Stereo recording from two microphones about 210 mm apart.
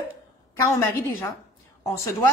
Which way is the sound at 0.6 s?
15° left (ahead or behind).